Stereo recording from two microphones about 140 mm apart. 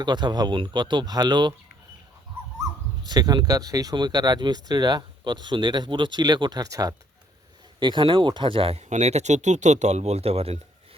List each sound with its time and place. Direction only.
0.0 s speech: 30° right (ahead or behind)
3.1 s speech: 30° right (ahead or behind); by 10.6 s 45° right (ahead or behind)